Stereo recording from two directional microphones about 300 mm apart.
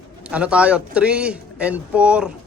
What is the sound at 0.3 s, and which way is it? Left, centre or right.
A man's voice, centre.